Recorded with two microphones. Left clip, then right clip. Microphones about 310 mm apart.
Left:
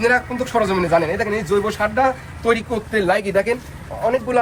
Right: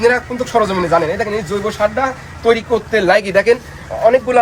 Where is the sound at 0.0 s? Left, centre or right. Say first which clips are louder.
Right 3 dB; centre.